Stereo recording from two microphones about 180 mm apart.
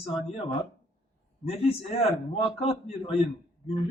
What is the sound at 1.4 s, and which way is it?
A man's voice, 35° left (ahead or behind).